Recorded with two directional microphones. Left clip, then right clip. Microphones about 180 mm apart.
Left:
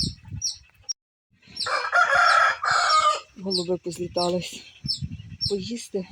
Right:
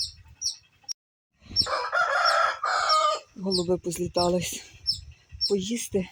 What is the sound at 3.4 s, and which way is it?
Speech, centre (ahead or behind).